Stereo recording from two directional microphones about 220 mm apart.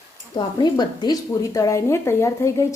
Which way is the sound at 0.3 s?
20° left (ahead or behind).